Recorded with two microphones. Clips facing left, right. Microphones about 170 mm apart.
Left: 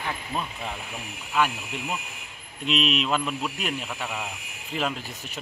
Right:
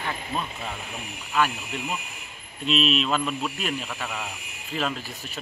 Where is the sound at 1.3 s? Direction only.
15° left (ahead or behind).